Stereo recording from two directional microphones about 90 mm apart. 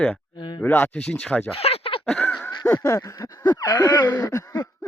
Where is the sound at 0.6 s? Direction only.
20° left (ahead or behind).